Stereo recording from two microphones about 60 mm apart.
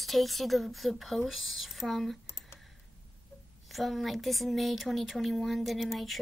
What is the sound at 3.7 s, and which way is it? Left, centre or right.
Speech, centre.